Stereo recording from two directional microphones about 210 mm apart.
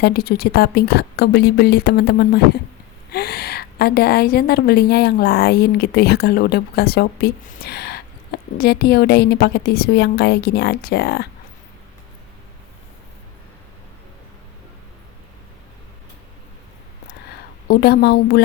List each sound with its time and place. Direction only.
0.0 s a woman's voice: 45° left (ahead or behind)
17.7 s a woman's voice: 50° left (ahead or behind)